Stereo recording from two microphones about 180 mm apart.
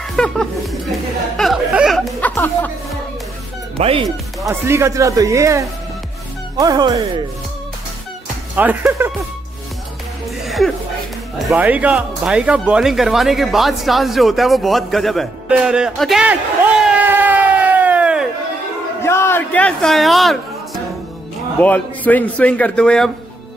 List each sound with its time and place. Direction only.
0.1 s speech: 5° left (ahead or behind)
1.3 s music: centre (ahead or behind)
3.7 s speech: 30° right (ahead or behind)
4.4 s speech: 15° right (ahead or behind)
8.5 s speech: 10° right (ahead or behind)
10.4 s a sound: centre (ahead or behind)
11.5 s speech: 10° right (ahead or behind)
19.0 s a man's voice: 15° left (ahead or behind)